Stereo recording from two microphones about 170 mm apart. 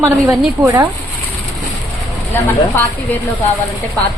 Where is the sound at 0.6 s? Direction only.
20° right (ahead or behind).